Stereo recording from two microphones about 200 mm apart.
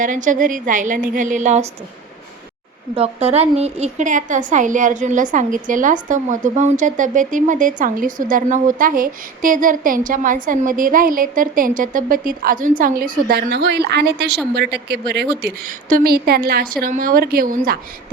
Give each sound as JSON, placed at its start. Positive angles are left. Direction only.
{"t": 0.0, "sound": "a woman's voice", "side_deg": -40}
{"t": 2.9, "sound": "a woman's voice", "side_deg": -30}